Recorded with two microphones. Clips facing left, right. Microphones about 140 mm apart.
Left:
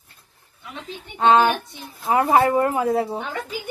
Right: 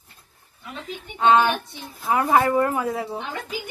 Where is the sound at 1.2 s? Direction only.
35° left (ahead or behind).